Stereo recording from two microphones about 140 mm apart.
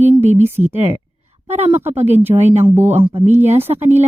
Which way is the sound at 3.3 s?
15° right (ahead or behind).